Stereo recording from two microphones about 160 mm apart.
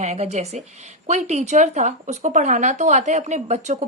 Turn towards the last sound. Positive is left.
turn(degrees=-45)  # may be behind; listen again after turning